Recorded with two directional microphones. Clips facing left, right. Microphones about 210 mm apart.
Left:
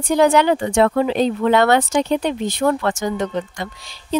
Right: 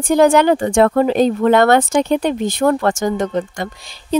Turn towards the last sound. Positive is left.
turn(degrees=-50)  # may be behind; listen again after turning